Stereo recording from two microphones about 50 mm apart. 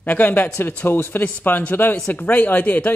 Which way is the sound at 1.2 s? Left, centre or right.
Left.